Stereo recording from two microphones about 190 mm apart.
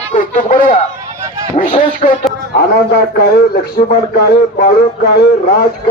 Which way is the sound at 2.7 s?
55° left (ahead or behind).